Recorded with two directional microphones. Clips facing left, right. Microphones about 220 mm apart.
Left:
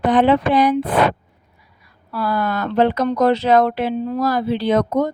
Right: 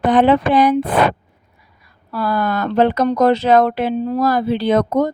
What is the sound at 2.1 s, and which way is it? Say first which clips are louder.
Speech: right 2 dB; 45° right (ahead or behind).